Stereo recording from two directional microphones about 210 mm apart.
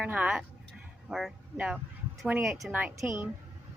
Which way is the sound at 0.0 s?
5° right (ahead or behind).